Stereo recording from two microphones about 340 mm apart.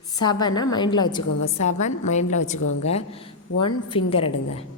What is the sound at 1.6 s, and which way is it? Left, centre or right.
A woman's voice, centre.